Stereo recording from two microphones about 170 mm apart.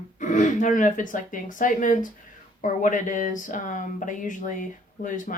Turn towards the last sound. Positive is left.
turn(degrees=50)  # may be behind; listen again after turning